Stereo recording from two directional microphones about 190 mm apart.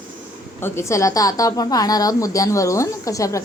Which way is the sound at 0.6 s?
15° left (ahead or behind).